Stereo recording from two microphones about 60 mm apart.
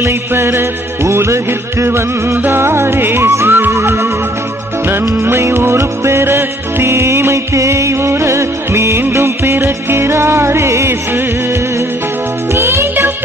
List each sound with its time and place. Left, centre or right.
0.0 s music: right
12.5 s music for children: right